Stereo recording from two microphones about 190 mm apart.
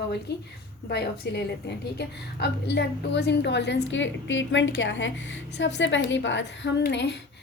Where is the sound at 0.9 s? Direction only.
60° left (ahead or behind).